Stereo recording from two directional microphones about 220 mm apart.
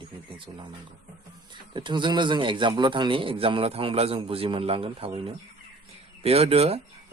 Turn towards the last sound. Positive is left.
turn(degrees=-25)  # may be behind; listen again after turning